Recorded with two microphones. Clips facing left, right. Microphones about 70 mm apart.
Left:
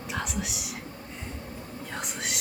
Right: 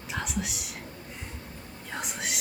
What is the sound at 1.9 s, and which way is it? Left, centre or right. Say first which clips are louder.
Whispering: right 1 dB; centre.